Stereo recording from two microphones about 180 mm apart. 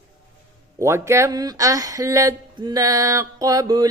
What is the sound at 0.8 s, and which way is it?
Mantra, 15° right (ahead or behind).